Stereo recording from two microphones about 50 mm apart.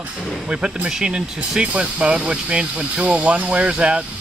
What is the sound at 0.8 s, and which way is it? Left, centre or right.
Speech, centre.